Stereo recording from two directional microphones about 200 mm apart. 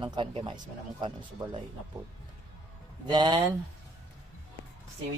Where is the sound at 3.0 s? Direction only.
20° right (ahead or behind).